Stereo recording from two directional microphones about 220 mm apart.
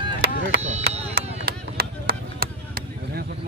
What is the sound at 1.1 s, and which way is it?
Chop, 45° right (ahead or behind).